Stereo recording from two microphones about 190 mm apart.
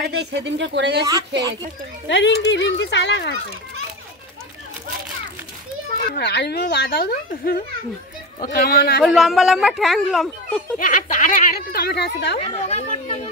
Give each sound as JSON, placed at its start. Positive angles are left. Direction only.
{"t": 0.1, "sound": "speech", "side_deg": -65}
{"t": 2.0, "sound": "speech", "side_deg": 70}
{"t": 6.1, "sound": "a woman's voice", "side_deg": 60}
{"t": 9.0, "sound": "a woman's voice", "side_deg": 0}
{"t": 10.8, "sound": "speech", "side_deg": 45}
{"t": 12.4, "sound": "speech", "side_deg": 35}